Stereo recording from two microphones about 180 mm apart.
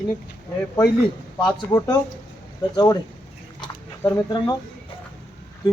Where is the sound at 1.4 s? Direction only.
20° left (ahead or behind).